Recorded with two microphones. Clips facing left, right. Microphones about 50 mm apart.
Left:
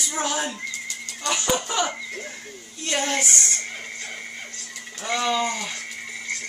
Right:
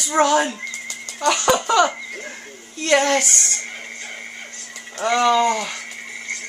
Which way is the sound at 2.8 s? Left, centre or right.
Right.